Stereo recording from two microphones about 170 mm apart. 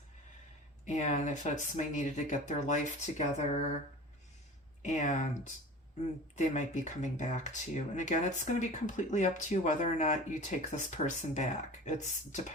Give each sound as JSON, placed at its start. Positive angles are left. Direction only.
{"t": 0.9, "sound": "speech", "side_deg": 45}
{"t": 4.8, "sound": "speech", "side_deg": 45}